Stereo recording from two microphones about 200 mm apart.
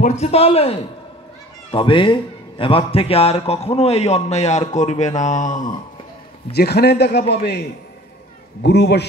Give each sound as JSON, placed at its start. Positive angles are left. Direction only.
{"t": 0.0, "sound": "a man's voice", "side_deg": 35}
{"t": 6.5, "sound": "a man's voice", "side_deg": 55}
{"t": 8.6, "sound": "a man's voice", "side_deg": 55}